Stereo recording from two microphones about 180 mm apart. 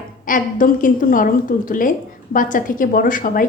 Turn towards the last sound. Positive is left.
turn(degrees=50)  # may be behind; listen again after turning